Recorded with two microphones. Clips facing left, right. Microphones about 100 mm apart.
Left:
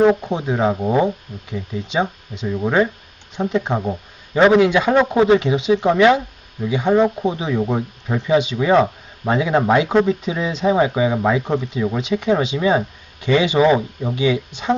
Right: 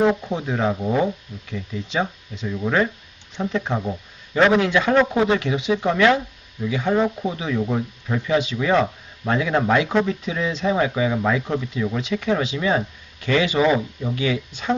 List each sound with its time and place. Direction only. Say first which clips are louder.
0.2 s speech: left 4 dB; 20° left (ahead or behind)